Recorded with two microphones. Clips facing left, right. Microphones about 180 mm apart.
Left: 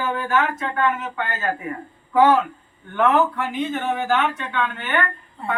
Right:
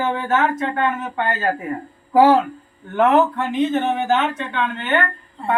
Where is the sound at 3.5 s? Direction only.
20° right (ahead or behind).